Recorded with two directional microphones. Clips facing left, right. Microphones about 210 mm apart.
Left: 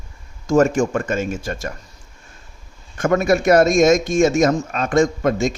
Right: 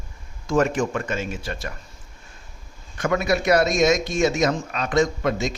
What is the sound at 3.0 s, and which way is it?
Speech, 45° left (ahead or behind).